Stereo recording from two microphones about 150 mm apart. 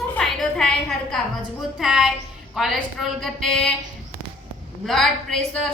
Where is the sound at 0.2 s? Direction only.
5° left (ahead or behind).